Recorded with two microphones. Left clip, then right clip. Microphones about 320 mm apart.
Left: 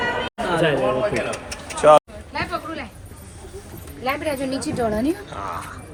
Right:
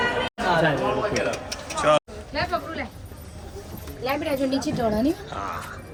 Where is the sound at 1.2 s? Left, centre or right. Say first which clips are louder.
Even; centre.